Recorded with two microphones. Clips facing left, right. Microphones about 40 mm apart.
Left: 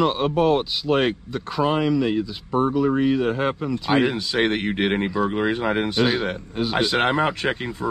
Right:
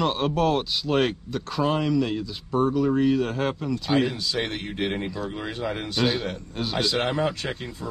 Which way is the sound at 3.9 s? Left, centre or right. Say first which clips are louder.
Left 5 dB; left.